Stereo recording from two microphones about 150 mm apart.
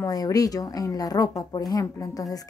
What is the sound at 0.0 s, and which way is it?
Speech, 25° left (ahead or behind).